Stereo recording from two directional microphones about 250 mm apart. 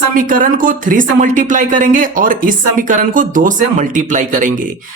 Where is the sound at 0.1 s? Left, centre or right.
Right.